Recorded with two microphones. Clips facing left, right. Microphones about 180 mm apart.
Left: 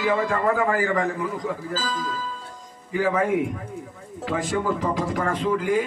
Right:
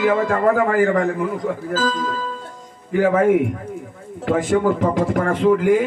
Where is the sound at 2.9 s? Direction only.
50° right (ahead or behind).